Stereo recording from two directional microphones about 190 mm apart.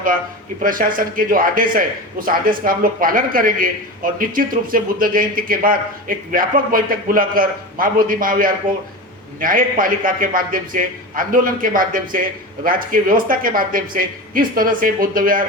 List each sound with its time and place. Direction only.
0.6 s a man's voice: 45° right (ahead or behind)